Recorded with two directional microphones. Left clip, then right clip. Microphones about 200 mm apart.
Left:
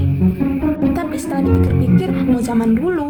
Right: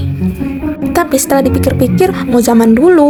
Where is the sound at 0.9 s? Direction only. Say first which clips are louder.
Right 10 dB; 45° right (ahead or behind).